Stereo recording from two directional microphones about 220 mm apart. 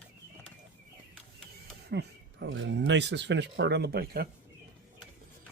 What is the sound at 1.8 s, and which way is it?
Speech, 50° right (ahead or behind).